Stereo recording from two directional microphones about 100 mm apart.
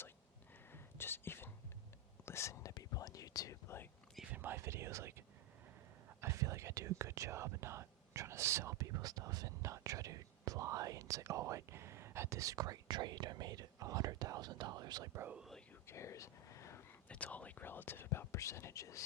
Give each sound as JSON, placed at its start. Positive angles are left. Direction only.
{"t": 0.7, "sound": "whispering", "side_deg": 20}
{"t": 4.3, "sound": "whispering", "side_deg": -20}
{"t": 15.1, "sound": "whispering", "side_deg": -25}
{"t": 15.4, "sound": "whispering", "side_deg": 0}
{"t": 15.9, "sound": "whispering", "side_deg": 30}
{"t": 17.1, "sound": "whispering", "side_deg": 15}